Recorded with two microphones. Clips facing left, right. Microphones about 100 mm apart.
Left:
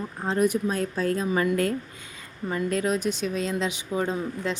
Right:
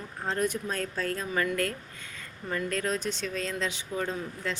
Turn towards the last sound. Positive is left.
turn(degrees=20)  # may be behind; listen again after turning